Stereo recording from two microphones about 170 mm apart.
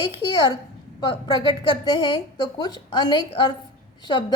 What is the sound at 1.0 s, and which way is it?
A woman's voice, 30° left (ahead or behind).